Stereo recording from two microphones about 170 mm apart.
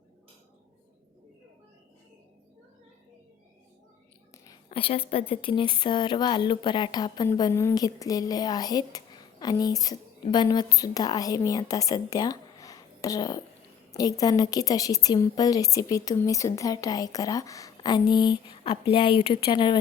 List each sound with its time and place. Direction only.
4.7 s a woman's voice: 35° left (ahead or behind)